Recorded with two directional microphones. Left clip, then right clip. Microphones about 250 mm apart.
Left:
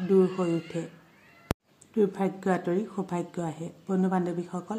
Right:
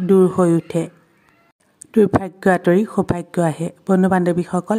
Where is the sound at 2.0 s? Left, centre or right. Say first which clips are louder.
Right 11 dB; right.